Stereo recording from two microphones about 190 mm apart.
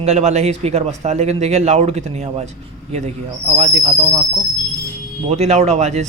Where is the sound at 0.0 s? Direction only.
35° right (ahead or behind).